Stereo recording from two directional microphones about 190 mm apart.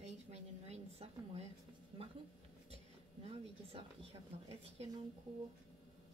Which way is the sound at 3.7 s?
30° right (ahead or behind).